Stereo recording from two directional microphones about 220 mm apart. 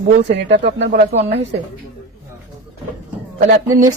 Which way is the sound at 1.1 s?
30° right (ahead or behind).